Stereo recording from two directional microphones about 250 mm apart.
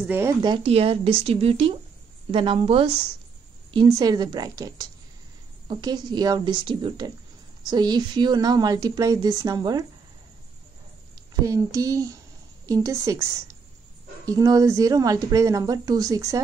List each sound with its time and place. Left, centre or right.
0.0 s a woman's voice: centre
11.4 s speech: centre